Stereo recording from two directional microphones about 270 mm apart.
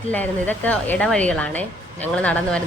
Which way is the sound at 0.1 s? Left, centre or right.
Centre.